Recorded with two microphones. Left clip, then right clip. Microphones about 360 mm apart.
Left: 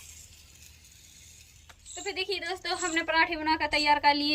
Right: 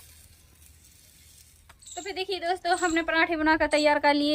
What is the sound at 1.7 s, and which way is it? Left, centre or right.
Speech, centre.